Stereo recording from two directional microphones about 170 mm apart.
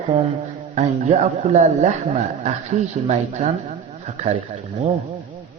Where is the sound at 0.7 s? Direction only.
40° right (ahead or behind).